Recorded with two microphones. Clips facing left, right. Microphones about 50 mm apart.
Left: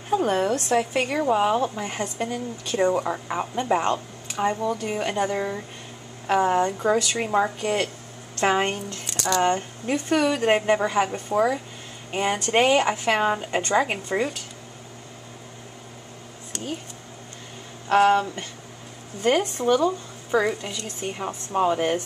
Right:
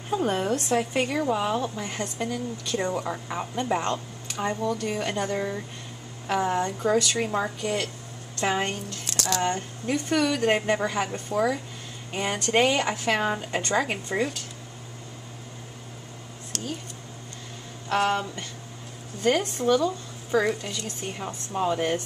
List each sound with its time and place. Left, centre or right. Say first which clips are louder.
1.0 s a woman's voice: left 4 dB; centre
9.1 s speech: left 4 dB; centre
9.4 s a woman's voice: left 5 dB; centre
16.5 s a sound: left 1 dB; centre
17.9 s a woman's voice: left 6 dB; centre